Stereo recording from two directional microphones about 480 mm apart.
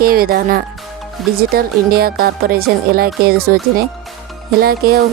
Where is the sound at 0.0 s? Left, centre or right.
Centre.